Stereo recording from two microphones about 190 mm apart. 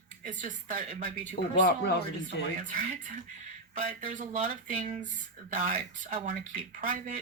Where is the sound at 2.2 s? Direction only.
40° right (ahead or behind).